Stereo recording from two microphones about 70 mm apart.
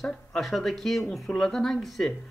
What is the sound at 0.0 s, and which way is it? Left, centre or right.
Speech, centre.